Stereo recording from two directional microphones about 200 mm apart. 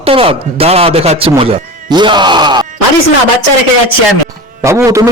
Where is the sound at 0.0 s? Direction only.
25° right (ahead or behind).